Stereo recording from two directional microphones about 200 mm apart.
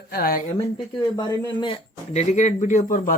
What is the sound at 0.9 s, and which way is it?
Speech, 20° left (ahead or behind).